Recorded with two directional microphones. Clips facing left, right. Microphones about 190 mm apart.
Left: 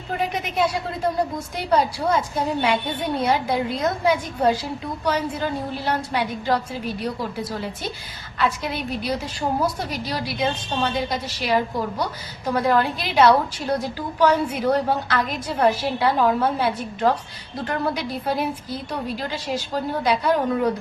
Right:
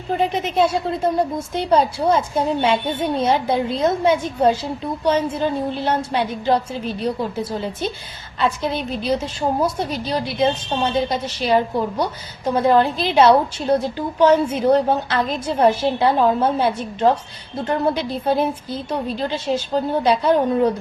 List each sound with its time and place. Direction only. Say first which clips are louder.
0.2 s a woman's voice: right 4 dB; 25° right (ahead or behind)